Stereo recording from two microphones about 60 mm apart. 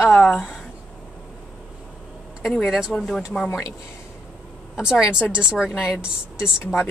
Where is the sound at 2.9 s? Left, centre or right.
Centre.